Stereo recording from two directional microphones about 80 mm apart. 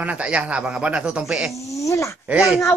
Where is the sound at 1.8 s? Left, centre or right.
Left.